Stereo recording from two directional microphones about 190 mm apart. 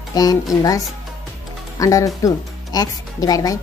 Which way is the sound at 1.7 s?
20° left (ahead or behind).